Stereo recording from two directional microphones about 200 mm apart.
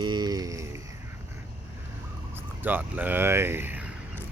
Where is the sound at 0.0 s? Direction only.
20° right (ahead or behind).